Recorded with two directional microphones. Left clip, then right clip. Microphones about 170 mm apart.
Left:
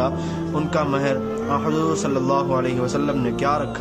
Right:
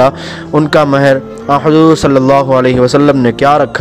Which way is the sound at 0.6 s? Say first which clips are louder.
Right 14 dB; 50° right (ahead or behind).